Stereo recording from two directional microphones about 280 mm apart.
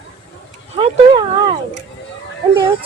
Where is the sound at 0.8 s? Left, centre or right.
Centre.